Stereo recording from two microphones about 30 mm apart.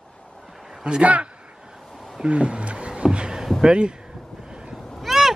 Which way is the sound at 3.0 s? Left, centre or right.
Right.